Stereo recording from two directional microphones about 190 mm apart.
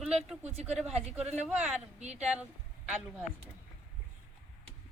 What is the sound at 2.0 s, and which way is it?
Speech, 35° right (ahead or behind).